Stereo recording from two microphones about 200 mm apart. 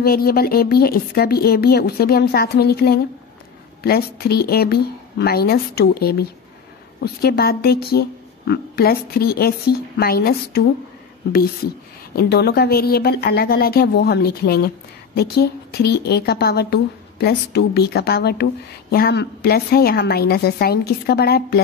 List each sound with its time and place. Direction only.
0.0 s a woman's voice: 50° left (ahead or behind)
12.2 s a woman's voice: 55° left (ahead or behind)